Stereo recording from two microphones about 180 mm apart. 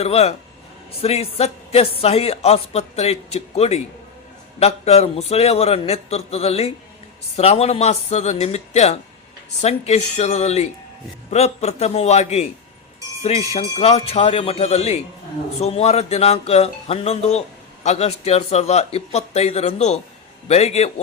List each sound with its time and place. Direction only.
0.0 s speech: 35° left (ahead or behind)